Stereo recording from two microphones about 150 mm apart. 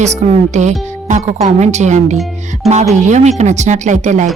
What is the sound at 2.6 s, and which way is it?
Speech, centre (ahead or behind).